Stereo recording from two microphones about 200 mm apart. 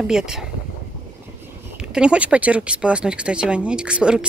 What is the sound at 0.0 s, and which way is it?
Speech, centre (ahead or behind).